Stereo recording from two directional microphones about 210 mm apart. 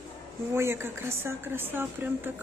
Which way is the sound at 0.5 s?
10° right (ahead or behind).